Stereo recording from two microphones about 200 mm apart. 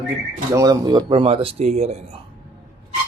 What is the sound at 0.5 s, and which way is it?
Speech, 15° right (ahead or behind).